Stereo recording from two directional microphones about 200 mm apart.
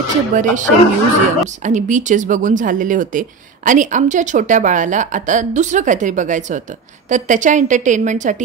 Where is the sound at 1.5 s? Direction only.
40° right (ahead or behind).